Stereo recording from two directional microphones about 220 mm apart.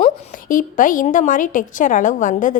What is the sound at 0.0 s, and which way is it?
A woman's voice, 35° left (ahead or behind).